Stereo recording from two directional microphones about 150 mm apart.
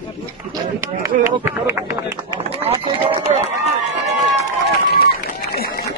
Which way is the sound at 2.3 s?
35° right (ahead or behind).